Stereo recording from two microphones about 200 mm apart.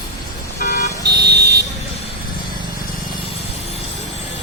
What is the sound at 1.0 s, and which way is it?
Vehicle, 55° right (ahead or behind).